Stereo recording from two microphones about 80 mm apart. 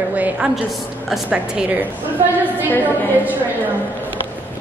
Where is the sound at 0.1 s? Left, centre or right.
Centre.